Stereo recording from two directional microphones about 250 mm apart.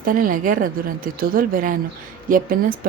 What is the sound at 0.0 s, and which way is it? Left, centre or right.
Speech, right.